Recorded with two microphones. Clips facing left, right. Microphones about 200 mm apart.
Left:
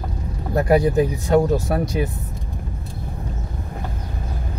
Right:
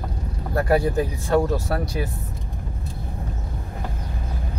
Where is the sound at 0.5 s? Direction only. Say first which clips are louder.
Left 4 dB; 20° left (ahead or behind).